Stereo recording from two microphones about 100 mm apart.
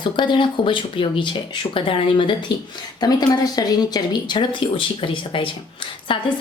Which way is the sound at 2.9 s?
40° left (ahead or behind).